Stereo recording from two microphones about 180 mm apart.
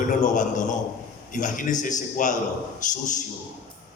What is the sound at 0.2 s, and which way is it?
A man's voice, 45° left (ahead or behind).